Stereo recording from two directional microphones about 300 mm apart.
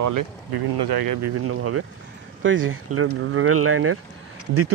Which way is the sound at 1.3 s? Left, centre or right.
Right.